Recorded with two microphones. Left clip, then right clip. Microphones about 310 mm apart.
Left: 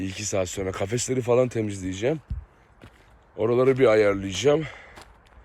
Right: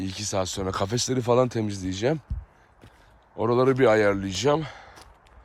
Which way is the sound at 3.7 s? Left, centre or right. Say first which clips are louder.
Left 1 dB; centre.